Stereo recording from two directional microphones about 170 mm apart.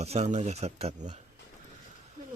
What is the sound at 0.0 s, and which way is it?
Speech, 40° right (ahead or behind).